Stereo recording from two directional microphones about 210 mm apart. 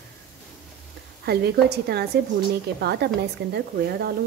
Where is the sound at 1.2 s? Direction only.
50° right (ahead or behind).